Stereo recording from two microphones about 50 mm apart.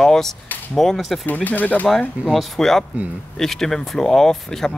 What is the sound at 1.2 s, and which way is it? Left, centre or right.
Speech, left.